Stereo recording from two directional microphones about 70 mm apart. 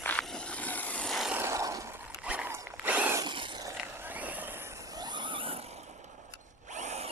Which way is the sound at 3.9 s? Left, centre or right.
Right.